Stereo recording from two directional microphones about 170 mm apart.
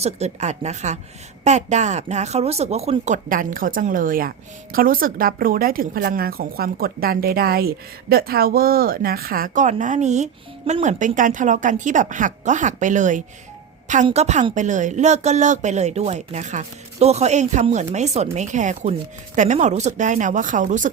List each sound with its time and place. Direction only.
0.0 s a woman's voice: 40° right (ahead or behind)